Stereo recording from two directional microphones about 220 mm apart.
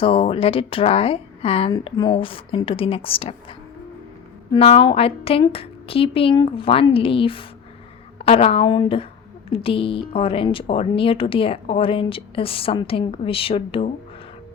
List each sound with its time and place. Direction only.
0.0 s speech: 25° left (ahead or behind)
4.5 s speech: 25° left (ahead or behind)